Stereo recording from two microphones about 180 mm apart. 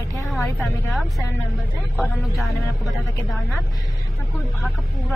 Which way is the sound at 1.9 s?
Centre (ahead or behind).